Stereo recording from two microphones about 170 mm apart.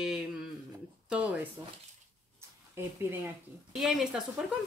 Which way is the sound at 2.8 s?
15° right (ahead or behind).